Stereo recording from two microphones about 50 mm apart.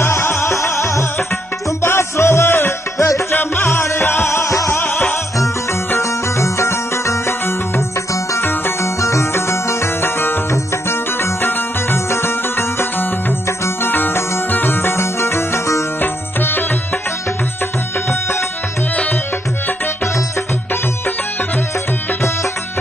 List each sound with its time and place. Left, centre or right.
0.0 s music: left
1.8 s music: left
5.9 s music: left
8.1 s music: left
8.5 s music: left
9.0 s music: left
9.3 s music: left
10.5 s music: left
16.0 s music: left